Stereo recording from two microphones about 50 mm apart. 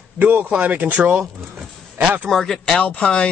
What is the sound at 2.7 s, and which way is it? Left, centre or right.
Speech, left.